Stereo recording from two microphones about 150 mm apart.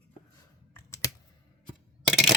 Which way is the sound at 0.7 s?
20° left (ahead or behind).